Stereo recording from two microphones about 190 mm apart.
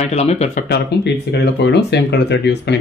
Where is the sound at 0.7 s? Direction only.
60° left (ahead or behind).